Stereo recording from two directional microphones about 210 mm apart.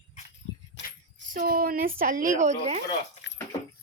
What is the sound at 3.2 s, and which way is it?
Dog, 55° left (ahead or behind).